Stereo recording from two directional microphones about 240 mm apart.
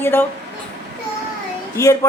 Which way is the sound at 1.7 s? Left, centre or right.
Centre.